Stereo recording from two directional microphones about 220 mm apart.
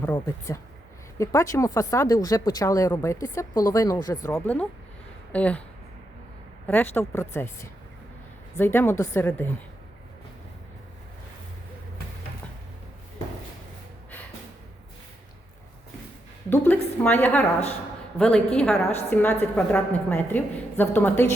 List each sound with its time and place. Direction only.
0.0 s a woman's voice: 15° left (ahead or behind)
6.7 s a woman's voice: 10° left (ahead or behind)
16.5 s a woman's voice: 10° left (ahead or behind)